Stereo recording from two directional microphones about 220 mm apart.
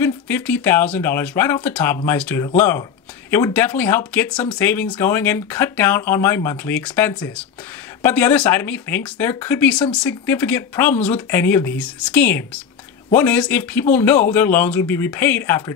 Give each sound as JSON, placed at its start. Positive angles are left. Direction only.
{"t": 0.0, "sound": "speech", "side_deg": 10}